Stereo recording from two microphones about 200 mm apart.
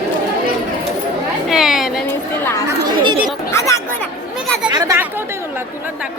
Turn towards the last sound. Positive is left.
turn(degrees=-20)  # may be behind; listen again after turning